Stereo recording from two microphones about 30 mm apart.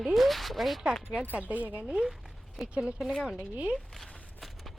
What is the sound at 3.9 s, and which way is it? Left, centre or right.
Walk, centre.